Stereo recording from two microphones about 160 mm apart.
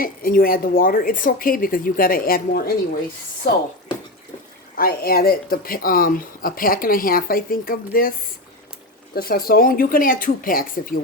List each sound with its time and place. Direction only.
0.0 s speech: 60° left (ahead or behind)
4.7 s speech: 65° left (ahead or behind)
9.1 s speech: 70° left (ahead or behind)